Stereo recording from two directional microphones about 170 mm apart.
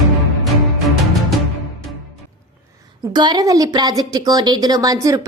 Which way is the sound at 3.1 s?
25° right (ahead or behind).